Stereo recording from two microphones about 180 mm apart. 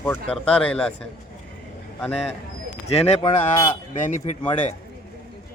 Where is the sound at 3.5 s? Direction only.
30° left (ahead or behind).